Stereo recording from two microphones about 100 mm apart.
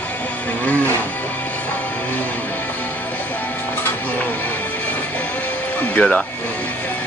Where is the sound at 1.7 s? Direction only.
15° left (ahead or behind).